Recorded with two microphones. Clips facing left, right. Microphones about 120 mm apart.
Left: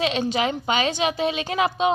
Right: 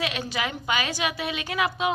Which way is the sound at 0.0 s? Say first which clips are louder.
Left 7 dB; 25° left (ahead or behind).